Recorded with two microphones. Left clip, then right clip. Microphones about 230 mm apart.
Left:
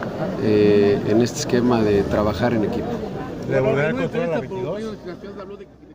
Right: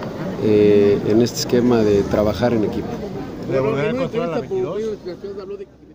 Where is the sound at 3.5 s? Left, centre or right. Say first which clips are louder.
Even; left.